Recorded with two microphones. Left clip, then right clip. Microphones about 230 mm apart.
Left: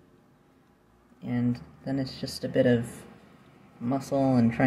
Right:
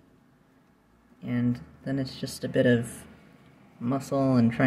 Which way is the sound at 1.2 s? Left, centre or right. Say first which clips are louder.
Right 1 dB; centre.